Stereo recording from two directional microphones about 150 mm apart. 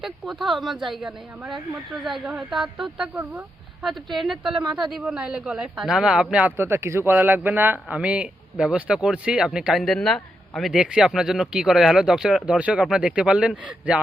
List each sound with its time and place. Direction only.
0.0 s a man's voice: centre (ahead or behind)